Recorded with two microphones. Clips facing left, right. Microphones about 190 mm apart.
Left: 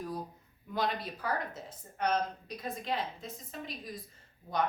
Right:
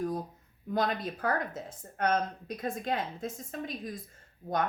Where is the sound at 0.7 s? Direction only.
50° right (ahead or behind).